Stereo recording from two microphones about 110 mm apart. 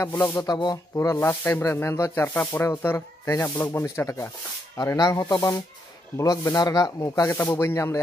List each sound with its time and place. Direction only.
0.0 s speech: 25° left (ahead or behind)
0.4 s speech: 40° left (ahead or behind)
0.9 s speech: 25° left (ahead or behind)
4.9 s speech: 35° left (ahead or behind)